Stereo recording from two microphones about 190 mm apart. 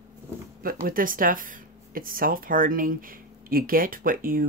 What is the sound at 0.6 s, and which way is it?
Speech, 50° right (ahead or behind).